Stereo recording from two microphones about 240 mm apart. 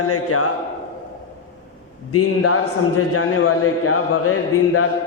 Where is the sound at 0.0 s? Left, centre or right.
Left.